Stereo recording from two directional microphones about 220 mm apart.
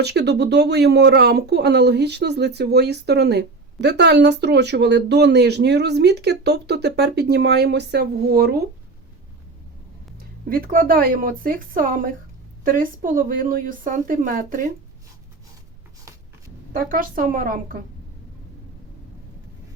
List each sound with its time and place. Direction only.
0.0 s speech: 50° right (ahead or behind)
10.5 s a woman's voice: 40° right (ahead or behind)
16.7 s a woman's voice: 40° right (ahead or behind)